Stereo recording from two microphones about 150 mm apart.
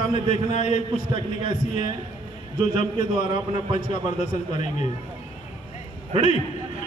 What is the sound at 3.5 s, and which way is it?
A man's voice, 55° left (ahead or behind).